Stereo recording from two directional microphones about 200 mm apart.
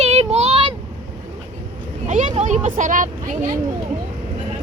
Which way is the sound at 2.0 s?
40° right (ahead or behind).